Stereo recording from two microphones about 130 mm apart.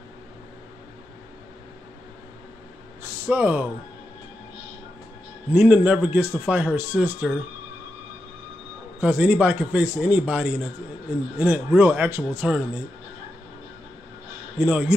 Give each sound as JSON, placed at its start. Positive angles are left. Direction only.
{"t": 3.3, "sound": "a man's voice", "side_deg": -15}
{"t": 5.5, "sound": "a man's voice", "side_deg": -15}
{"t": 9.0, "sound": "a man's voice", "side_deg": -10}
{"t": 14.6, "sound": "a man's voice", "side_deg": -10}